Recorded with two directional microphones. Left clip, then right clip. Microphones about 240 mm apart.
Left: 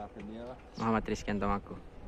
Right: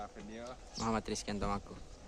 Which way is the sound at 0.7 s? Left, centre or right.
Centre.